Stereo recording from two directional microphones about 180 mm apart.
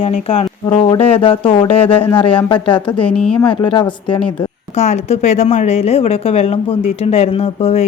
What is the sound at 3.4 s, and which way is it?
A woman's voice, 25° left (ahead or behind).